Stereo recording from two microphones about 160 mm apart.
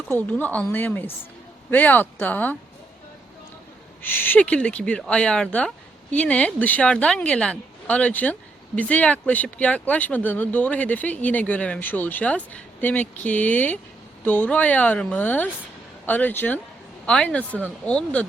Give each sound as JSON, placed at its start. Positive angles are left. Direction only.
{"t": 0.1, "sound": "speech", "side_deg": 10}
{"t": 4.0, "sound": "speech", "side_deg": 10}